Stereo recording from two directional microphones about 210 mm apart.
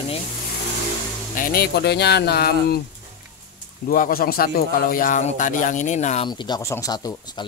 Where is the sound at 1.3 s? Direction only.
45° left (ahead or behind).